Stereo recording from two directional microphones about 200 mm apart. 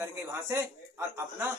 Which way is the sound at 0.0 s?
15° right (ahead or behind).